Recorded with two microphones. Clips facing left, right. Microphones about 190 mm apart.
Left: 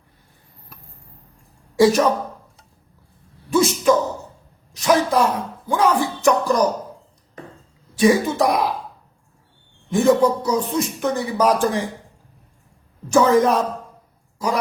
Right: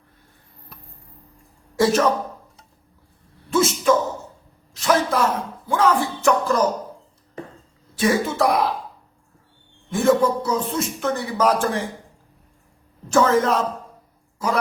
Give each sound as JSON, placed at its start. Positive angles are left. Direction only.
{"t": 3.5, "sound": "a sound", "side_deg": 15}
{"t": 4.7, "sound": "speech", "side_deg": 15}
{"t": 7.9, "sound": "speech", "side_deg": 15}
{"t": 9.9, "sound": "speech", "side_deg": 15}
{"t": 13.1, "sound": "a man's voice", "side_deg": 15}